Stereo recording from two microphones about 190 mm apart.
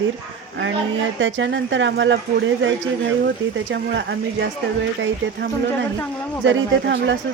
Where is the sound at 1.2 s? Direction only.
85° right.